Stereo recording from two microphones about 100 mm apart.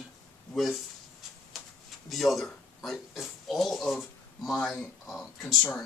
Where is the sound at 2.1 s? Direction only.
Centre (ahead or behind).